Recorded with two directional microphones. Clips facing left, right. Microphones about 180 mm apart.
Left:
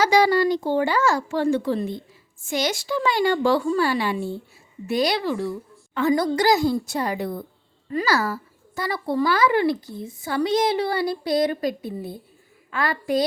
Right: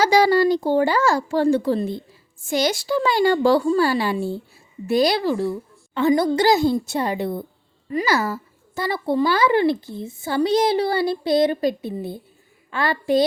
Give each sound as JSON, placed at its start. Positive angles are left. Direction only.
{"t": 0.0, "sound": "a woman's voice", "side_deg": -30}